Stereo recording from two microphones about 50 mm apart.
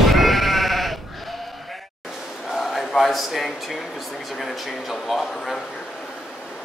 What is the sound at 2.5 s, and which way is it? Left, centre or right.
Speech, centre.